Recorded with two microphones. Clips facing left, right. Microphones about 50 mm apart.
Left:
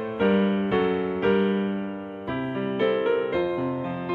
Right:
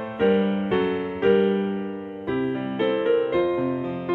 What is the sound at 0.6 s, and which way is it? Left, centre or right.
Music, right.